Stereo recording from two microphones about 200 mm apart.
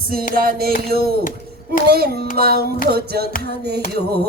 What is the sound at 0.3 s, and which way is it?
Music, 50° right (ahead or behind).